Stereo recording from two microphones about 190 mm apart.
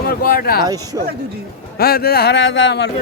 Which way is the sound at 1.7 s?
50° left (ahead or behind).